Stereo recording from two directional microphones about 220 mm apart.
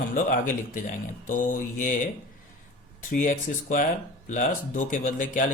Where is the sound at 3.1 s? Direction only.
35° left (ahead or behind).